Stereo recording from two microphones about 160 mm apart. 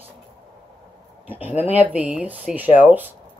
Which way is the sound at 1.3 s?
10° right (ahead or behind).